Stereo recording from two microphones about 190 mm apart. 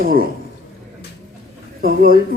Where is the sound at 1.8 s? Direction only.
50° right (ahead or behind).